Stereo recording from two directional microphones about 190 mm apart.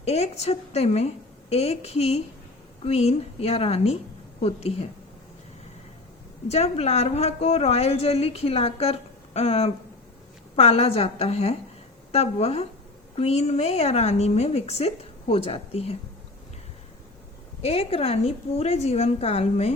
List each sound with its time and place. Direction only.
0.0 s a woman's voice: 35° left (ahead or behind)
6.5 s a woman's voice: 35° left (ahead or behind)
17.6 s a woman's voice: 30° left (ahead or behind)